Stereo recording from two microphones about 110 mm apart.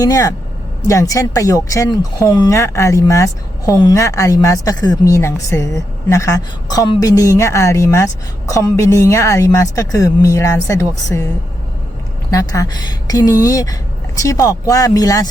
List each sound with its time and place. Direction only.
0.0 s a woman's voice: 30° left (ahead or behind)
12.3 s speech: 30° left (ahead or behind)